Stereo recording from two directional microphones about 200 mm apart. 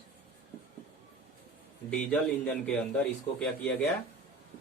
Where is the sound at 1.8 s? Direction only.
5° left (ahead or behind).